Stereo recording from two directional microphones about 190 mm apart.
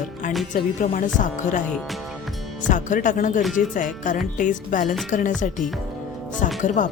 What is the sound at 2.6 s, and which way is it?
Speech, 40° left (ahead or behind).